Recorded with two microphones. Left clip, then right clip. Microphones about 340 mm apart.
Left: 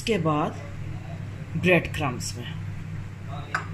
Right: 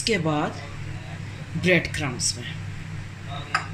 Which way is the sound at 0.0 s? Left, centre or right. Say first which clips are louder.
Right 1 dB; centre.